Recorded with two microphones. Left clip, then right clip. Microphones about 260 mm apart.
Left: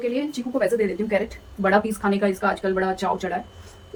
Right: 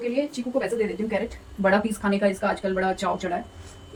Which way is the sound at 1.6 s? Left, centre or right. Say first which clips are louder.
Left 2 dB; centre.